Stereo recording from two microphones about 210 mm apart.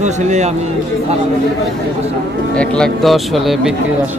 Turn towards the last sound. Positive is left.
turn(degrees=0)  # may be behind; listen again after turning